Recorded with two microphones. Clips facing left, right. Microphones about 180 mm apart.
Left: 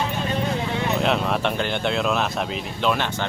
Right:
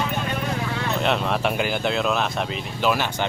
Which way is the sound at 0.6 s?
20° left (ahead or behind).